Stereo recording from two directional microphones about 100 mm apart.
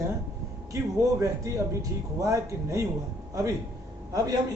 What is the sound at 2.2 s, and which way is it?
Speech, 35° right (ahead or behind).